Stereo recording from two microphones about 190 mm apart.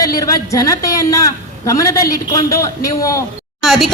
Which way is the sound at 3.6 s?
Centre (ahead or behind).